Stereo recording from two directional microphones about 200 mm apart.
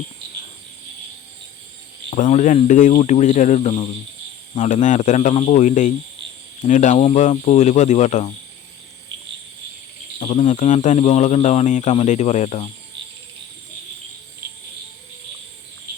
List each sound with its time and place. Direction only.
2.0 s speech: 40° left (ahead or behind)
10.2 s speech: 30° left (ahead or behind)